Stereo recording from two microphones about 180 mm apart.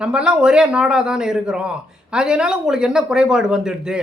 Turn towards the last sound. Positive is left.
turn(degrees=-5)  # may be behind; listen again after turning